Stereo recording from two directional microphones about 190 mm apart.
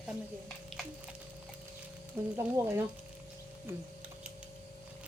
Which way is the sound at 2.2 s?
10° right (ahead or behind).